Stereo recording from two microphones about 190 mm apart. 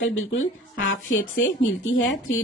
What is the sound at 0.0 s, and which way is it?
Speech, 90° left.